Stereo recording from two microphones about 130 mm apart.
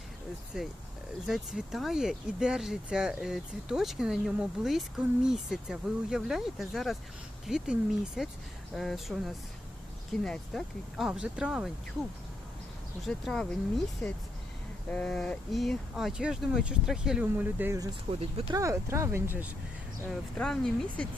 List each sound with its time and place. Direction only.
0.5 s speech: 5° right (ahead or behind)
13.1 s speech: 5° left (ahead or behind); by 19.5 s 15° right (ahead or behind)
20.1 s speech: 5° left (ahead or behind)